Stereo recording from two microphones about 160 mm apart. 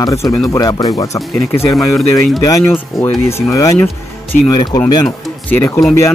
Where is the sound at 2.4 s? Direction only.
20° left (ahead or behind).